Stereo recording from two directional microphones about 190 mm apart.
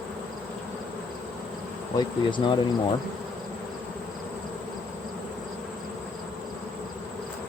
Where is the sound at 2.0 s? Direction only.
25° left (ahead or behind).